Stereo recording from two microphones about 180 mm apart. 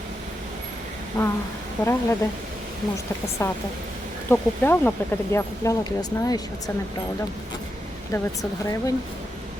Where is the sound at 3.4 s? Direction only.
15° left (ahead or behind).